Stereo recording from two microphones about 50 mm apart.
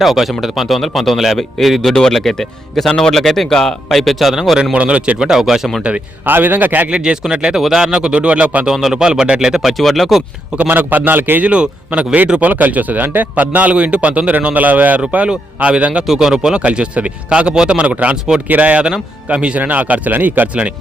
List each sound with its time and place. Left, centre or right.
0.0 s speech: centre
4.7 s speech: right
5.3 s speech: centre
6.2 s a man's voice: right
6.9 s speech: centre
8.7 s speech: centre
9.7 s speech: centre
10.7 s a man's voice: right
11.4 s speech: right
12.4 s a man's voice: right
15.3 s speech: centre
16.0 s speech: centre
16.6 s a man's voice: right